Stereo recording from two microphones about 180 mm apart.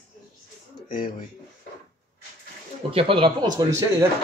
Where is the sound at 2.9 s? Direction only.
30° right (ahead or behind).